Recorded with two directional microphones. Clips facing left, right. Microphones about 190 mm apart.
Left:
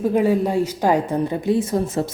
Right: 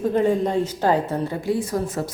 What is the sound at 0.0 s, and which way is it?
A woman's voice, 10° left (ahead or behind).